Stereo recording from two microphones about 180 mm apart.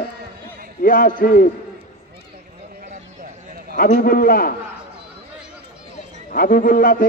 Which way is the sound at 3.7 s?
50° left (ahead or behind).